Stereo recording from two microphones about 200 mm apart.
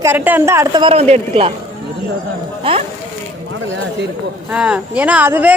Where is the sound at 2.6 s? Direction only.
25° right (ahead or behind).